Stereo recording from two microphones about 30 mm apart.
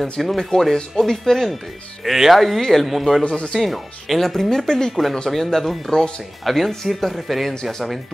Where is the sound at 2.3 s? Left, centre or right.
Centre.